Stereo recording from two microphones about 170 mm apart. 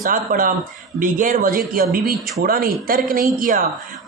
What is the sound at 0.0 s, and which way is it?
Speech, 55° right (ahead or behind).